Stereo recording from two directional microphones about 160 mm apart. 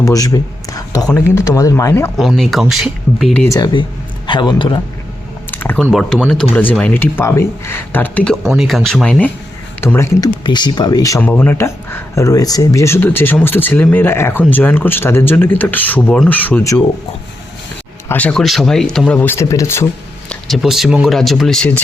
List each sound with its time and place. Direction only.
0.0 s speech: 20° left (ahead or behind)
2.1 s speech: centre (ahead or behind)
3.4 s speech: 20° left (ahead or behind)
5.5 s typing: 10° left (ahead or behind)
5.9 s speech: 5° left (ahead or behind)
10.4 s speech: 30° left (ahead or behind)
11.2 s speech: 10° left (ahead or behind)
18.1 s speech: 10° left (ahead or behind)
20.3 s speech: centre (ahead or behind)